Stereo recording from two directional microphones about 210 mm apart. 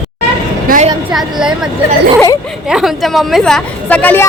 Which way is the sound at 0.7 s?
35° right (ahead or behind).